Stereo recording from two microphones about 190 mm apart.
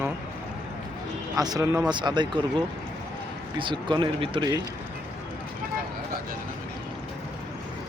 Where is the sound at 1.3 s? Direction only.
20° right (ahead or behind).